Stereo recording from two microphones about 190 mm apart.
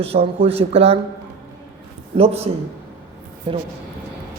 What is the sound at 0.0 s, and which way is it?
Speech, 30° right (ahead or behind).